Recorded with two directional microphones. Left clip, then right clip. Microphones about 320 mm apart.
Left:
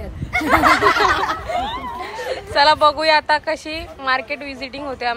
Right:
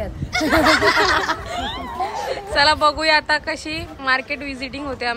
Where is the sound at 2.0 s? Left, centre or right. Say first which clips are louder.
Right 2 dB; centre.